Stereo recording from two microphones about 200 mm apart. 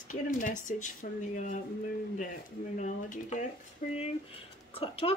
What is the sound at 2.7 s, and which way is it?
A woman's voice, 35° left (ahead or behind).